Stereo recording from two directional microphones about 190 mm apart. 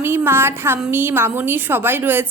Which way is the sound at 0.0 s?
10° right (ahead or behind).